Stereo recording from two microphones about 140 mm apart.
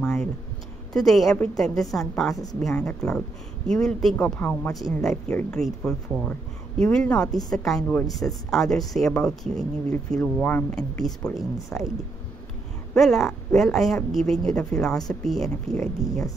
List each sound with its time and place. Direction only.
0.0 s a sound: 5° left (ahead or behind)
0.9 s speech: centre (ahead or behind)
12.9 s speech: centre (ahead or behind)
16.0 s speech: 25° left (ahead or behind)